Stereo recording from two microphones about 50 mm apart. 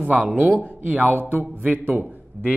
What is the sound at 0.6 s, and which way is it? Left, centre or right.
A man's voice, right.